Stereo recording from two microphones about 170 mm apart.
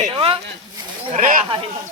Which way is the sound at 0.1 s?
30° right (ahead or behind).